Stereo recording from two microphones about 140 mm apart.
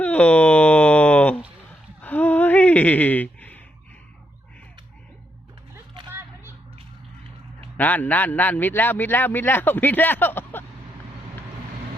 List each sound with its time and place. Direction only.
0.0 s a sound: 10° left (ahead or behind)
6.1 s whip: 15° right (ahead or behind)
7.8 s a man's voice: 10° left (ahead or behind)